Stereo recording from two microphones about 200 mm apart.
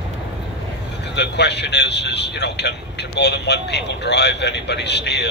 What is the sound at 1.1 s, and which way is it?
A man's voice, 60° left (ahead or behind).